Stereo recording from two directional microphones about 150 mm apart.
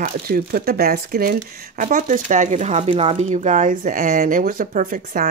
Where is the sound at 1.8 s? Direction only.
60° right (ahead or behind).